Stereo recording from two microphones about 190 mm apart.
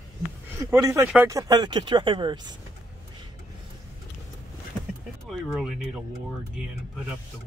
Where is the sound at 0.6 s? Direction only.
15° right (ahead or behind).